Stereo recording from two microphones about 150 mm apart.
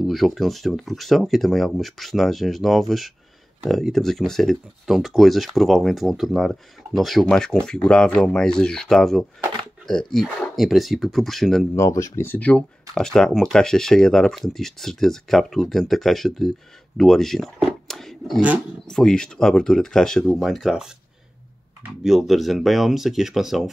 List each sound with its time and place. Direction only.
0.0 s speech: centre (ahead or behind)
11.7 s speech: 20° left (ahead or behind); by 17.5 s 5° left (ahead or behind)
17.8 s a sound: centre (ahead or behind)
18.9 s speech: 5° left (ahead or behind)
22.0 s speech: centre (ahead or behind)